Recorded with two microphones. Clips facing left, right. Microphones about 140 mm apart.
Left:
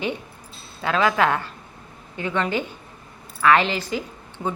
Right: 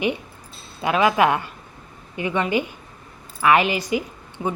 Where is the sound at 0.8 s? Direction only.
15° right (ahead or behind).